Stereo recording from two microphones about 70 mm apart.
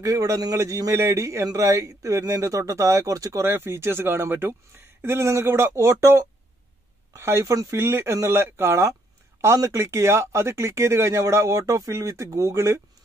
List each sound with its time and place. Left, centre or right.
0.0 s a man's voice: right